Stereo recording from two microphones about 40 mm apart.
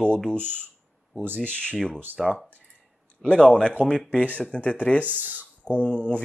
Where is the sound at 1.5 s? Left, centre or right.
Left.